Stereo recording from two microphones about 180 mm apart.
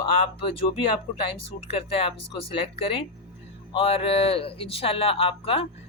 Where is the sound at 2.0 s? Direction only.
30° left (ahead or behind).